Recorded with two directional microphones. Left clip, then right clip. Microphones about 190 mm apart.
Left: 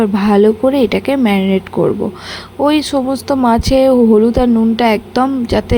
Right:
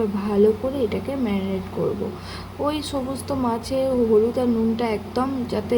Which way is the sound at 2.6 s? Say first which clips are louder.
Left 12 dB; 45° left (ahead or behind).